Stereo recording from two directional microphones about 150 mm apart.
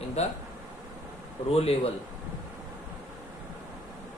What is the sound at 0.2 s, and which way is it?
Speech, 45° left (ahead or behind).